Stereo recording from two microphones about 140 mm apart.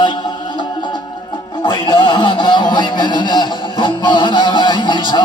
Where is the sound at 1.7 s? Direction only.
35° left (ahead or behind).